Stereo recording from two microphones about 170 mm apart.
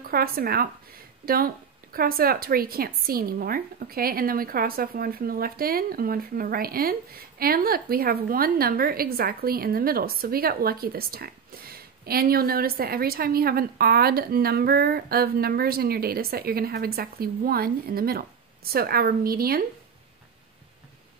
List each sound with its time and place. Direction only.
0.1 s speech: 60° right (ahead or behind)